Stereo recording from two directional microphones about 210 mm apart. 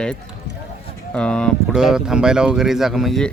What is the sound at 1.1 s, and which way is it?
Speech, 5° left (ahead or behind).